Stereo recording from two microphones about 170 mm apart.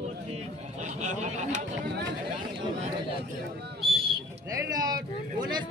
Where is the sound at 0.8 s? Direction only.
45° right (ahead or behind).